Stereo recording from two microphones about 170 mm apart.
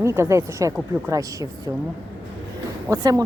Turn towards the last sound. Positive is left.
turn(degrees=-20)  # may be behind; listen again after turning